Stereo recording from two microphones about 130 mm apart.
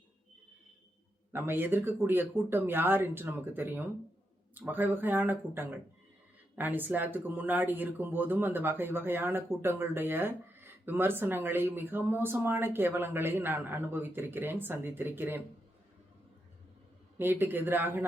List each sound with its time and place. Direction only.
1.3 s speech: 20° right (ahead or behind)
17.2 s speech: 15° right (ahead or behind)